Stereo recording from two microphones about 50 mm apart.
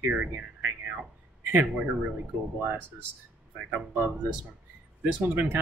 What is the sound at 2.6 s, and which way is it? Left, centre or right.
Speech, right.